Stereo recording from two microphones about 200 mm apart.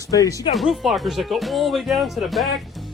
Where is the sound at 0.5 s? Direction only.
Centre (ahead or behind).